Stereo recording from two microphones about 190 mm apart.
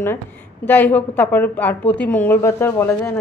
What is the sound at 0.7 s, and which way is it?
A woman's voice, 10° left (ahead or behind).